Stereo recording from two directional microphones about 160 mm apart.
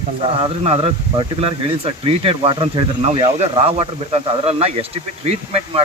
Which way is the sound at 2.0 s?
35° right (ahead or behind).